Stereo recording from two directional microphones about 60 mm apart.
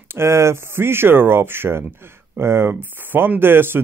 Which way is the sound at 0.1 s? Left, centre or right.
Right.